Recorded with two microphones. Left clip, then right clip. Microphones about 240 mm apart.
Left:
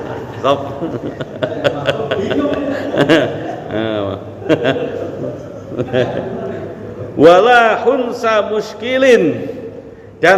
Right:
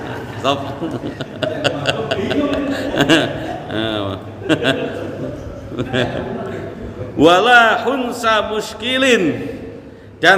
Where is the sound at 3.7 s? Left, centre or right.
Right.